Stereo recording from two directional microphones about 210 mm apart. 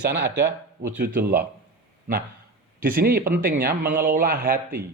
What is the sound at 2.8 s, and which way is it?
Speech, 45° right (ahead or behind).